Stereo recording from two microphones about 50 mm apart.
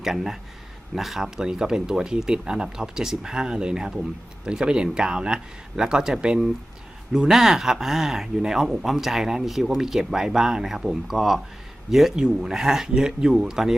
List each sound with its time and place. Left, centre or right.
0.0 s speech: centre